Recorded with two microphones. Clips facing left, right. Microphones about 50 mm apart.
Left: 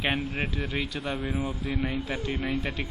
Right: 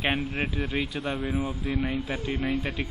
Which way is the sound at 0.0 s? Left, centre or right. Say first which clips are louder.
Right 1 dB; centre.